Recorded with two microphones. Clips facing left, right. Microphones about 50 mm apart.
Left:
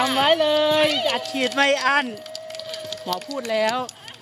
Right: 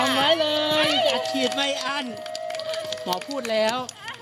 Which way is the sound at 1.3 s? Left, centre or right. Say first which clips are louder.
Left 5 dB; left.